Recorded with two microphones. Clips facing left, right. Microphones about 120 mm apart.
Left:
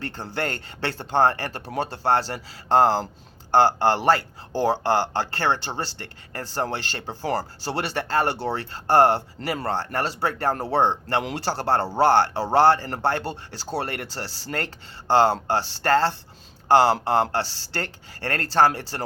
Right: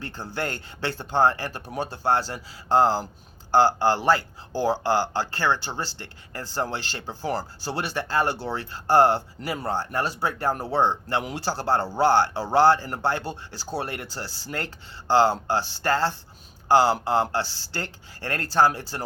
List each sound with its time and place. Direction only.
0.0 s speech: 60° left (ahead or behind)